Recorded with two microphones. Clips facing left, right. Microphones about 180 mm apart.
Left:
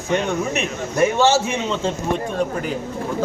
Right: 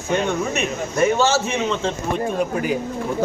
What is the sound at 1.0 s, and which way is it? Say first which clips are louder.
Speech: left 1 dB; 15° left (ahead or behind).